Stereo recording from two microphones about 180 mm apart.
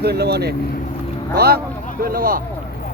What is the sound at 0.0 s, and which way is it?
Speech, 65° right (ahead or behind).